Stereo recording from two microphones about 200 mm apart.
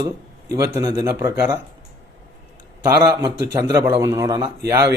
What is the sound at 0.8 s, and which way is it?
Speech, 15° right (ahead or behind).